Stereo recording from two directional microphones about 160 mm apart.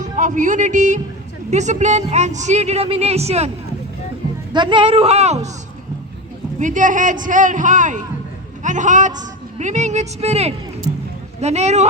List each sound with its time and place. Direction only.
0.0 s a woman's voice: 50° right (ahead or behind)
4.5 s speech: 30° right (ahead or behind)
6.6 s a woman's voice: 55° right (ahead or behind)